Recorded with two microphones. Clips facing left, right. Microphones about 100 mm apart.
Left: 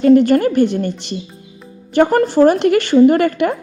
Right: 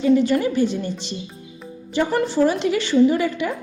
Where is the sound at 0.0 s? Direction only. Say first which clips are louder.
Left 7 dB; 60° left (ahead or behind).